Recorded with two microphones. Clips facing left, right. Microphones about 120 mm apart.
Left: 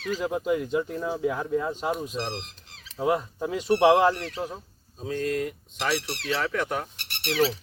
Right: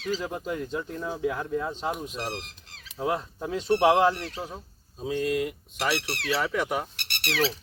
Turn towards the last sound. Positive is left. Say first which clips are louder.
# left 3 dB
turn(degrees=-80)